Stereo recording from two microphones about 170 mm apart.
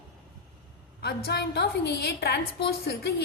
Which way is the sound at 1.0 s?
70° left (ahead or behind).